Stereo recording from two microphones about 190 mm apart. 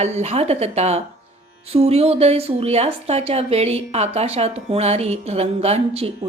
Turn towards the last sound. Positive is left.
turn(degrees=-30)  # may be behind; listen again after turning